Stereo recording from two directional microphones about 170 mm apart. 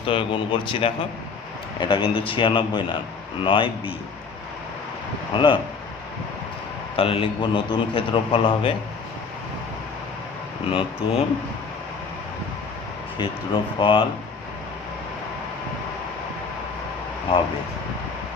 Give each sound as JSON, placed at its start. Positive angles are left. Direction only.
{"t": 0.0, "sound": "a man's voice", "side_deg": 30}
{"t": 5.3, "sound": "a man's voice", "side_deg": 30}
{"t": 6.9, "sound": "a man's voice", "side_deg": 35}
{"t": 10.7, "sound": "a man's voice", "side_deg": 30}
{"t": 13.1, "sound": "a man's voice", "side_deg": 25}